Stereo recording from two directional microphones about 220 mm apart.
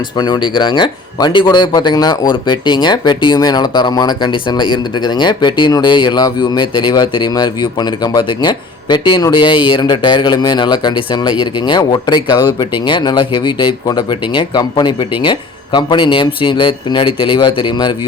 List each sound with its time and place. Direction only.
0.2 s speech: 20° left (ahead or behind)